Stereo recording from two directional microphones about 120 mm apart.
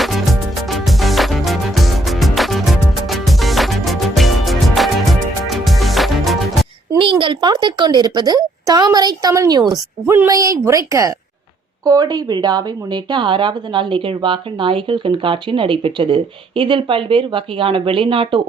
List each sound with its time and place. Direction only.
0.0 s music: centre (ahead or behind)
7.0 s a woman's voice: 45° right (ahead or behind)